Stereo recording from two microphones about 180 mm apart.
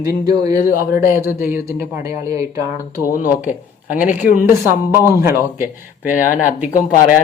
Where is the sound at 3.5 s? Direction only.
45° left (ahead or behind).